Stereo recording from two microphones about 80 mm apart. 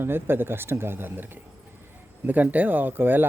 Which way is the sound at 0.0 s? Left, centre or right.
Right.